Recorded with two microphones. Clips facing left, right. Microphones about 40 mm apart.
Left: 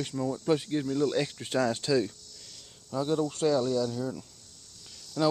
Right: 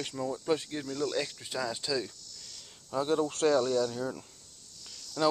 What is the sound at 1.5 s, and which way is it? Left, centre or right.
Speech, left.